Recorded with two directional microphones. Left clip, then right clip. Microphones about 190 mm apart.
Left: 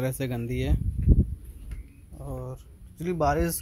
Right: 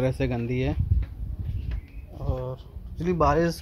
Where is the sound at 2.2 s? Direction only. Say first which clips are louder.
Right 5 dB; 10° left (ahead or behind).